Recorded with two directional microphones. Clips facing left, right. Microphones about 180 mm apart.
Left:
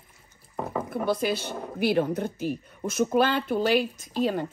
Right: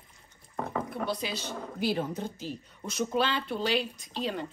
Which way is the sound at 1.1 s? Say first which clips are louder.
Left 7 dB; 55° left (ahead or behind).